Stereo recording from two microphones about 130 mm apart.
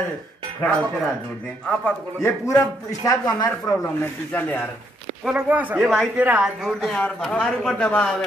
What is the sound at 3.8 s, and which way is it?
Speech, 15° left (ahead or behind).